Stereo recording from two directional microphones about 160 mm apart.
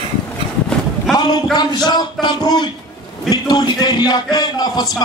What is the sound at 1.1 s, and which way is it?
Speech, 25° left (ahead or behind).